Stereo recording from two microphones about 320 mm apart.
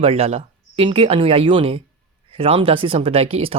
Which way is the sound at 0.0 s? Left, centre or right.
Centre.